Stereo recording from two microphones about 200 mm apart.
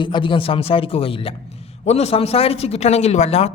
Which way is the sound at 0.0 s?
25° left (ahead or behind).